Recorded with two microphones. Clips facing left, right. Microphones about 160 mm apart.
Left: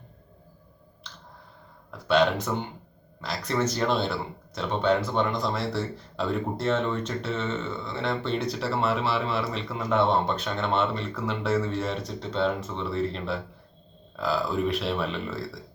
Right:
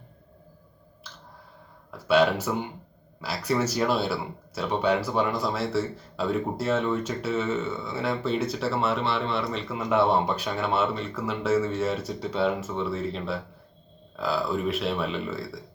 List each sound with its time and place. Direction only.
1.9 s speech: 5° right (ahead or behind)